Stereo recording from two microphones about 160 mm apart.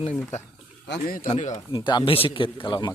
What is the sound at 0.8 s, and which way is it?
Speech, 75° left (ahead or behind).